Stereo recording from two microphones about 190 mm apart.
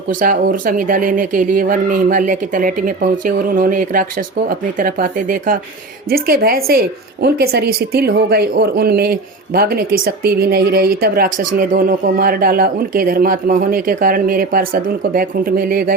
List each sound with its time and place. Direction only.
0.1 s a woman's voice: 45° right (ahead or behind)